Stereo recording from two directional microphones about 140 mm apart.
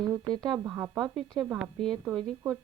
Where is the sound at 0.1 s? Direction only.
30° right (ahead or behind).